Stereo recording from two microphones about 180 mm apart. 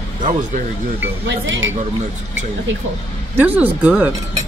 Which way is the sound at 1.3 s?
90° right.